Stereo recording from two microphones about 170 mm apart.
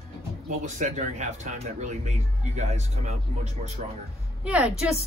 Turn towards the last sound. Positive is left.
turn(degrees=-5)  # may be behind; listen again after turning